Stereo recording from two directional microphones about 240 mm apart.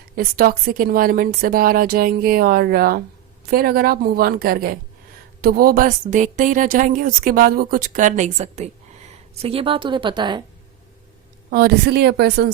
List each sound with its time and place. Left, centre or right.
0.2 s a woman's voice: right; by 10.4 s centre
11.5 s a woman's voice: right